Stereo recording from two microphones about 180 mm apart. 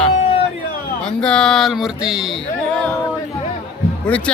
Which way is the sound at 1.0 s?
5° left (ahead or behind).